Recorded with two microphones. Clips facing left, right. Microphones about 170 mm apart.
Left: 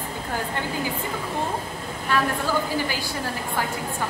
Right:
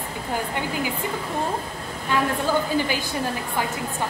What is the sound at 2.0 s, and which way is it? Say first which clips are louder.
A woman's voice: right 1 dB; 20° right (ahead or behind).